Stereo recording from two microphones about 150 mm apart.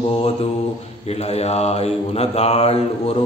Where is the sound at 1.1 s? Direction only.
45° left (ahead or behind).